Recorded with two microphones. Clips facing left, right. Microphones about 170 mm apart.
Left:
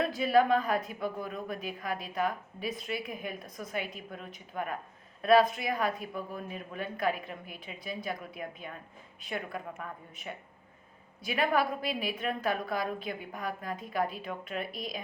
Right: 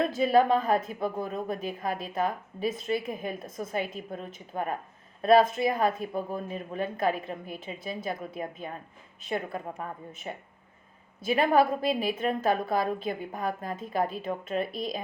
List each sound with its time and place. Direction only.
0.0 s a woman's voice: 25° right (ahead or behind)